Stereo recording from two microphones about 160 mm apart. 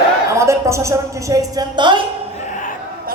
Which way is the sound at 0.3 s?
20° right (ahead or behind).